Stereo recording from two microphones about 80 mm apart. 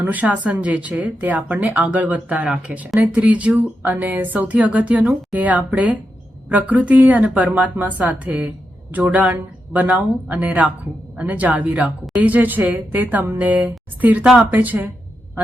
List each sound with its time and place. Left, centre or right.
0.0 s speech: centre